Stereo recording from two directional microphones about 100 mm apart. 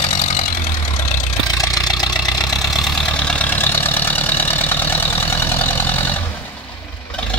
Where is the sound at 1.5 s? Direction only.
35° left (ahead or behind).